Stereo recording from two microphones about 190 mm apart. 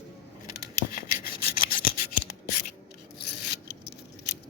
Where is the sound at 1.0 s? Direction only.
50° left (ahead or behind).